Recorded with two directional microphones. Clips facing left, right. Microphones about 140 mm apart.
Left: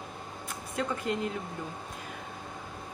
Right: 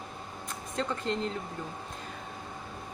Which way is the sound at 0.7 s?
10° left (ahead or behind).